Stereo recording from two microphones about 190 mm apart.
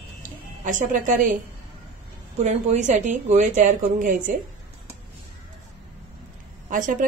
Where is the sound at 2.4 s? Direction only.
35° right (ahead or behind).